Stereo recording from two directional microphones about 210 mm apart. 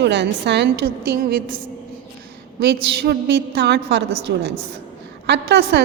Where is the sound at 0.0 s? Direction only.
55° right (ahead or behind).